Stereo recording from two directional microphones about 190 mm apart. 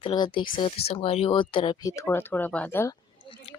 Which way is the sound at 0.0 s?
25° left (ahead or behind).